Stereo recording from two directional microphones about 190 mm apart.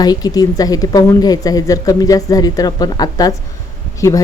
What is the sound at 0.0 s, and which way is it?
Speech, 20° left (ahead or behind).